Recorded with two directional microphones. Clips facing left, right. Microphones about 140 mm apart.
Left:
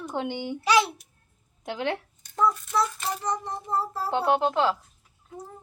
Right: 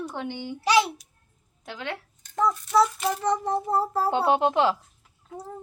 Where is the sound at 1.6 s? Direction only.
20° left (ahead or behind).